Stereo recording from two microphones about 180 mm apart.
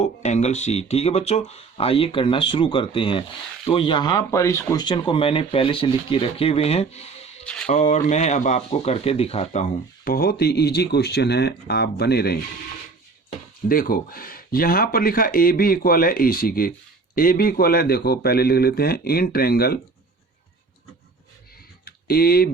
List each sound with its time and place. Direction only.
0.0 s speech: 40° left (ahead or behind)
7.4 s speech: 5° left (ahead or behind)
7.7 s speech: 40° left (ahead or behind)
10.0 s a man's voice: 55° left (ahead or behind)
13.7 s a man's voice: 55° left (ahead or behind)
21.8 s a sound: 60° left (ahead or behind)